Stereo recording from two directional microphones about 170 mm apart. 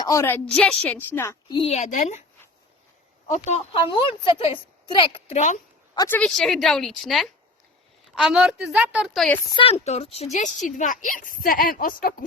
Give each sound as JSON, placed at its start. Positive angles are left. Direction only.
{"t": 0.0, "sound": "a woman's voice", "side_deg": 20}
{"t": 1.5, "sound": "a woman's voice", "side_deg": 30}
{"t": 3.2, "sound": "a woman's voice", "side_deg": 40}
{"t": 3.8, "sound": "a woman's voice", "side_deg": 30}
{"t": 6.1, "sound": "a woman's voice", "side_deg": 5}
{"t": 9.5, "sound": "a woman's voice", "side_deg": 30}